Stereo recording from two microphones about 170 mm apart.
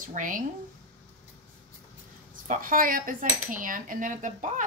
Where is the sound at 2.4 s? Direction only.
55° right (ahead or behind).